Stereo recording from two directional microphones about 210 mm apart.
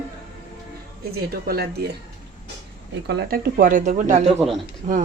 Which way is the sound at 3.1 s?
50° right (ahead or behind).